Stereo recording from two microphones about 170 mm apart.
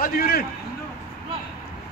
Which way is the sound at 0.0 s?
60° left (ahead or behind).